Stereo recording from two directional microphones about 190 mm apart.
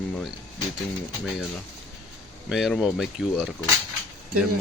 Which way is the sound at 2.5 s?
Centre (ahead or behind).